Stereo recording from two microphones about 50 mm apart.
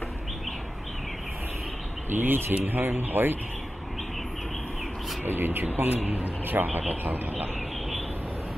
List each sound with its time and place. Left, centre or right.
2.1 s speech: right
5.2 s a man's voice: right